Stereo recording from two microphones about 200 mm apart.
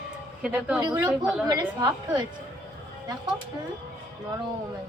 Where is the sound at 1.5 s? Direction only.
20° right (ahead or behind).